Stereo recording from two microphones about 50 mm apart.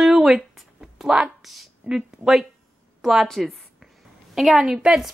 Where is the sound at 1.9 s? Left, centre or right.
Centre.